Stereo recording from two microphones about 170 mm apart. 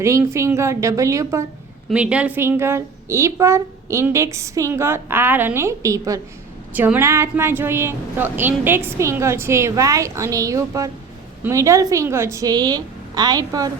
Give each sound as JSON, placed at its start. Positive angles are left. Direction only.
{"t": 0.0, "sound": "a woman's voice", "side_deg": -15}
{"t": 1.9, "sound": "a woman's voice", "side_deg": -5}